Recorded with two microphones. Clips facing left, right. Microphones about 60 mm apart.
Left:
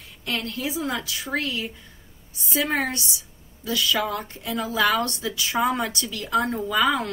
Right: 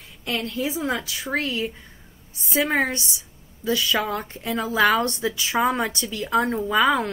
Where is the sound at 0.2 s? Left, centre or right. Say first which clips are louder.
Right 2 dB; right.